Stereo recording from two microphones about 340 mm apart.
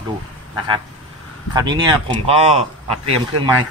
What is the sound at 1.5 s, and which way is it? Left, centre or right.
Speech, centre.